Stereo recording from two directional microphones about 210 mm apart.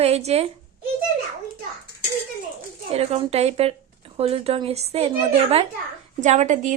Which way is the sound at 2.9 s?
30° right (ahead or behind).